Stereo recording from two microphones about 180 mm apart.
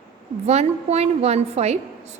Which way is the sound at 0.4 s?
35° right (ahead or behind).